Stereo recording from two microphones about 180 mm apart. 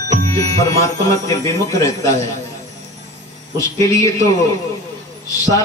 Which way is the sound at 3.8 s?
20° left (ahead or behind).